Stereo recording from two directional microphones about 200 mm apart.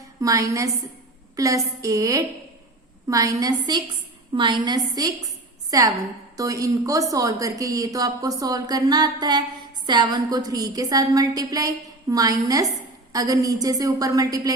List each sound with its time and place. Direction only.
0.2 s a woman's voice: 15° right (ahead or behind)